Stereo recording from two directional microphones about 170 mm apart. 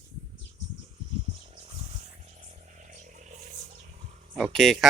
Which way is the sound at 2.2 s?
40° right (ahead or behind).